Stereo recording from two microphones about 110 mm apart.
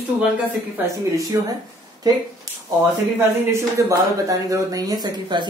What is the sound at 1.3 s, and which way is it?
Speech, 20° right (ahead or behind).